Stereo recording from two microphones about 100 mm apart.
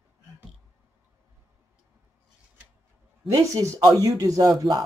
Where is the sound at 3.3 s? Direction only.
30° right (ahead or behind).